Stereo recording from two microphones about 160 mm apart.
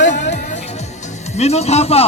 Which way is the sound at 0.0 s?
50° left (ahead or behind).